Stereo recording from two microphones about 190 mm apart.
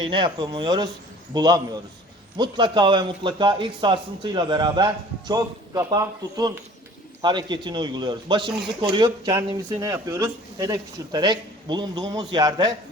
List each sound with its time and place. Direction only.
0.0 s speech: 25° right (ahead or behind)